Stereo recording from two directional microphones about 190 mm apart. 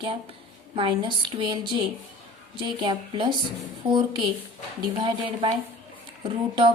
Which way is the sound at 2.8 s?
25° right (ahead or behind).